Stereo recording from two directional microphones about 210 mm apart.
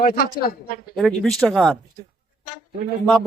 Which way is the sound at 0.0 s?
45° left (ahead or behind).